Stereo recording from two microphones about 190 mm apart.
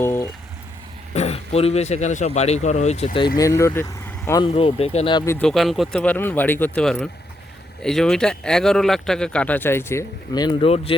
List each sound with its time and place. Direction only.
0.0 s vehicle: 15° left (ahead or behind)
1.1 s speech: 35° left (ahead or behind)
3.3 s speech: 15° left (ahead or behind)
4.5 s speech: 30° left (ahead or behind)
5.2 s speech: 15° left (ahead or behind)
5.5 s speech: centre (ahead or behind); by 10.9 s 30° left (ahead or behind)